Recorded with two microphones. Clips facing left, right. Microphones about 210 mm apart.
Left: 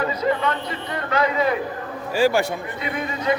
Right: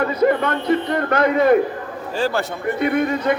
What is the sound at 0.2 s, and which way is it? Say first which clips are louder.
Speech: right 5 dB; 55° right (ahead or behind).